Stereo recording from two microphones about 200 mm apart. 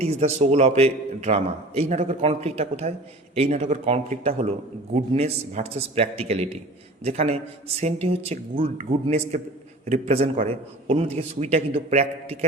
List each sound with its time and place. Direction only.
0.0 s a man's voice: 30° right (ahead or behind)